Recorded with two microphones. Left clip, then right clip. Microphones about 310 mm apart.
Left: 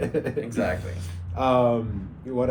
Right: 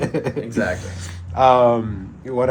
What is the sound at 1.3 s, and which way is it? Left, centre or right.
Speech, right.